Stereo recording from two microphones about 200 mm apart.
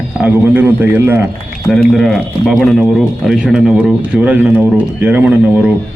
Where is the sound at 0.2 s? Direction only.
10° right (ahead or behind).